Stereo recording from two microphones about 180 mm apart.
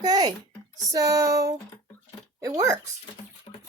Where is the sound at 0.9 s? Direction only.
20° right (ahead or behind).